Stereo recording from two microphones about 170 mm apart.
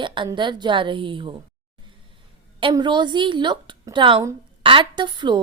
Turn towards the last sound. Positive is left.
turn(degrees=-25)  # may be behind; listen again after turning